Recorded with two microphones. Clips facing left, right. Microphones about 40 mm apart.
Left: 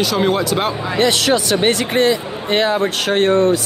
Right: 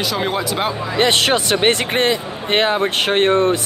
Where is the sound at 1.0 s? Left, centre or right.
Right.